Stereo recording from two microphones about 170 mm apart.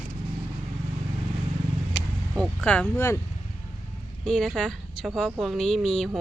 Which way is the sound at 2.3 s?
5° left (ahead or behind).